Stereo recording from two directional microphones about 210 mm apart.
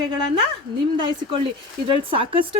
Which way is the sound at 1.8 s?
25° right (ahead or behind).